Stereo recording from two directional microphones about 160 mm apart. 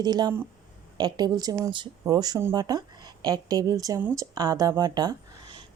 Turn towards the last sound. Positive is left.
turn(degrees=-25)  # may be behind; listen again after turning